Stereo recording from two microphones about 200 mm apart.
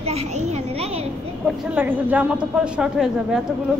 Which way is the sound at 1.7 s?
10° right (ahead or behind).